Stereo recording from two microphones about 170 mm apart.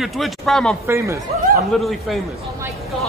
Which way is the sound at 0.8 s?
15° right (ahead or behind).